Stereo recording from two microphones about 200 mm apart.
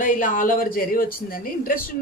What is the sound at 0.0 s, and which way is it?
Speech, 40° left (ahead or behind).